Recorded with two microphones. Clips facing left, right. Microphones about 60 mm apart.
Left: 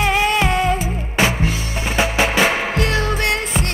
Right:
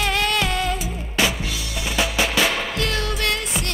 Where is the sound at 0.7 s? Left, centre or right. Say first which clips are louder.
Left 4 dB; left.